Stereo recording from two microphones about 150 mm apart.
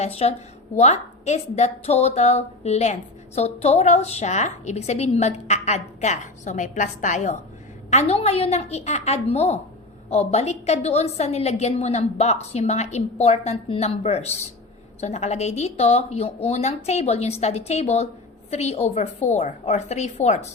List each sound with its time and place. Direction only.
0.0 s a woman's voice: 45° left (ahead or behind)